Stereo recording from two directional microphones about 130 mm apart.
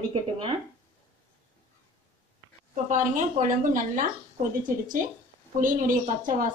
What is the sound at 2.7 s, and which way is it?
Speech, 85° right.